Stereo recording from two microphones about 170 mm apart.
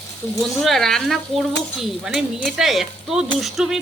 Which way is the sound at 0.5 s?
Centre (ahead or behind).